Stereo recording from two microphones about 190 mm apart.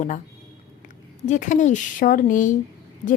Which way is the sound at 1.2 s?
40° left (ahead or behind).